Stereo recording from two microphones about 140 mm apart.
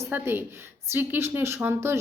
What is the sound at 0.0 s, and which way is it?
A woman's voice, 15° right (ahead or behind).